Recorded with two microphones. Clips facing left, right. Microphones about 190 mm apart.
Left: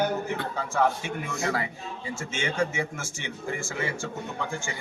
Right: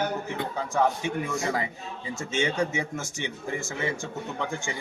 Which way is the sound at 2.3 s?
20° right (ahead or behind).